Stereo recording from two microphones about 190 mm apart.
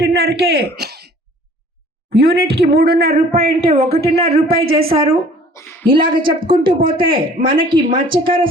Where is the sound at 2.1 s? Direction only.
55° right (ahead or behind).